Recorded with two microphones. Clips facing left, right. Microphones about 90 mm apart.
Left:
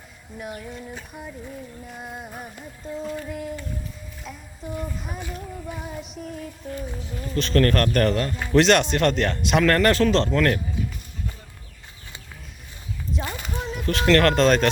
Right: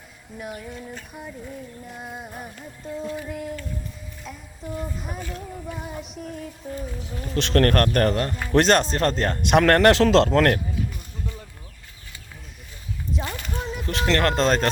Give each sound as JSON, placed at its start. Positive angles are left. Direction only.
{"t": 0.3, "sound": "music", "side_deg": 0}
{"t": 4.2, "sound": "child singing", "side_deg": 0}
{"t": 5.2, "sound": "music", "side_deg": 5}
{"t": 7.3, "sound": "speech", "side_deg": -65}
{"t": 9.4, "sound": "speech", "side_deg": -55}
{"t": 13.1, "sound": "a sound", "side_deg": 5}
{"t": 13.6, "sound": "music", "side_deg": 0}
{"t": 14.1, "sound": "speech", "side_deg": -15}
{"t": 14.3, "sound": "speech", "side_deg": -30}